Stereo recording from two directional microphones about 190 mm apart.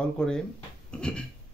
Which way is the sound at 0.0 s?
5° left (ahead or behind).